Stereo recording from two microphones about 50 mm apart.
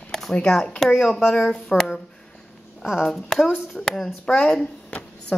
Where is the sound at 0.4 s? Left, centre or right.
Centre.